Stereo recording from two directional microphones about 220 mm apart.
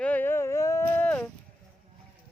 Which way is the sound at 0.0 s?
10° left (ahead or behind).